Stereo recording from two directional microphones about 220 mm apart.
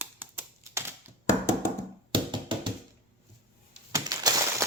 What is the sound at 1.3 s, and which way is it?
Hands, 10° left (ahead or behind).